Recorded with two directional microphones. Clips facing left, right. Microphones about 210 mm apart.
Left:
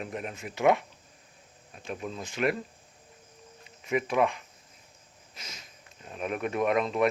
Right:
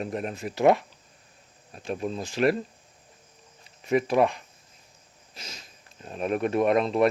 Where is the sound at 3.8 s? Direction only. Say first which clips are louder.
Right 4 dB; 35° right (ahead or behind).